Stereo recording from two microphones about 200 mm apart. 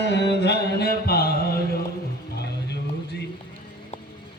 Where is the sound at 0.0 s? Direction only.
60° left (ahead or behind).